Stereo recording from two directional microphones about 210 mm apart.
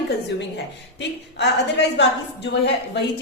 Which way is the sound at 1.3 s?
55° left (ahead or behind).